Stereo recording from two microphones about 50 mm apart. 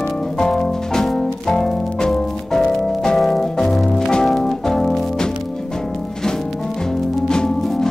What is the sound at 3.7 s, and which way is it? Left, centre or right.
Music, centre.